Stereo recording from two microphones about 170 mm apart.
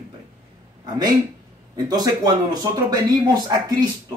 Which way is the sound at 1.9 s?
25° right (ahead or behind).